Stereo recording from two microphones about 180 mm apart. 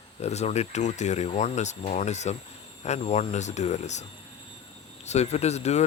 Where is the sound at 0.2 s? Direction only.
35° left (ahead or behind).